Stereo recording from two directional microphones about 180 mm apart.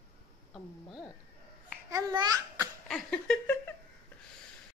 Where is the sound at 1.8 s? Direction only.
20° right (ahead or behind).